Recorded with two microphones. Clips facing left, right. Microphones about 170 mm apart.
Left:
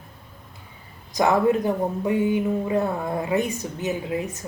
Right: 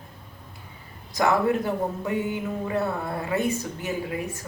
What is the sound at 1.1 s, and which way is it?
Speech, 20° left (ahead or behind).